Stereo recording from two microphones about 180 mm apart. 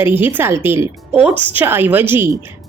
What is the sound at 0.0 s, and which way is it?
A woman's voice, 10° right (ahead or behind).